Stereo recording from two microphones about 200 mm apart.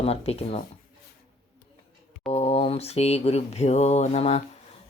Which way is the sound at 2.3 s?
30° left (ahead or behind).